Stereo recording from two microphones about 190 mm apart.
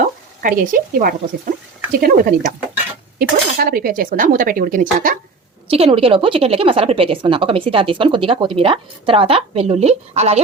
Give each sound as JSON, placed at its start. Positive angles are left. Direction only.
{"t": 0.0, "sound": "a sound", "side_deg": -45}
{"t": 2.0, "sound": "speech", "side_deg": -50}
{"t": 5.7, "sound": "a woman's voice", "side_deg": -30}